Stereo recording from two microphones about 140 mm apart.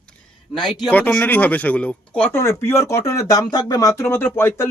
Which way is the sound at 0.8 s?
10° left (ahead or behind).